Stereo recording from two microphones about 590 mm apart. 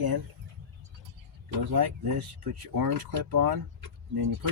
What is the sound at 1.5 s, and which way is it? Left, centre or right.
Speech, right.